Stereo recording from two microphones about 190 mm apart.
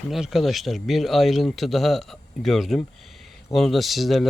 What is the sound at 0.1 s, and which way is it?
Speech, centre (ahead or behind).